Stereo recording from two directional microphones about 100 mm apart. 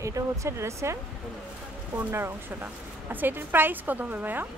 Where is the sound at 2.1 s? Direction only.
20° right (ahead or behind).